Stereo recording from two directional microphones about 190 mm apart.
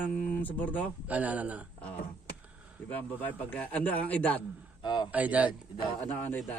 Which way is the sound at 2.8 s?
10° left (ahead or behind).